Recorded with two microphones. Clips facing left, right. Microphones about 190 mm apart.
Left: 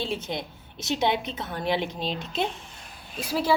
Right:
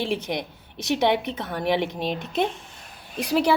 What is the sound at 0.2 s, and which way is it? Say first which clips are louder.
A woman's voice: right 3 dB; 15° right (ahead or behind).